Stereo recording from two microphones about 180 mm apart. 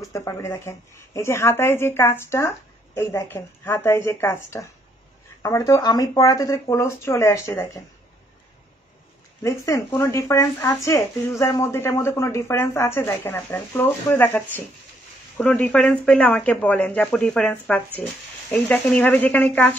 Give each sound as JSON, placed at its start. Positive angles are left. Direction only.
{"t": 0.0, "sound": "speech", "side_deg": 15}
{"t": 9.4, "sound": "speech", "side_deg": 15}